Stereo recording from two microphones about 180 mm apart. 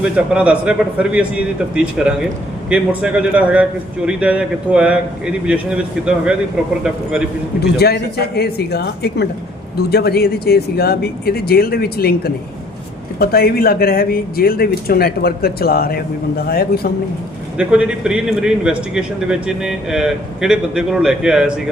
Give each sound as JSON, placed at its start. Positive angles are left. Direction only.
{"t": 0.0, "sound": "a man's voice", "side_deg": -5}
{"t": 7.6, "sound": "speech", "side_deg": 65}
{"t": 17.6, "sound": "a man's voice", "side_deg": -5}